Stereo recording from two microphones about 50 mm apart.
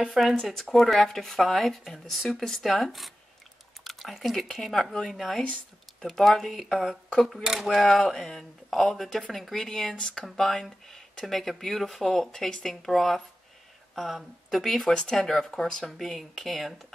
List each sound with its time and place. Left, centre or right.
0.0 s speech: centre
7.6 s speech: centre
10.2 s speech: centre